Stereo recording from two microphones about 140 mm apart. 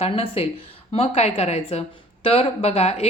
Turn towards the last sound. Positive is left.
turn(degrees=50)  # may be behind; listen again after turning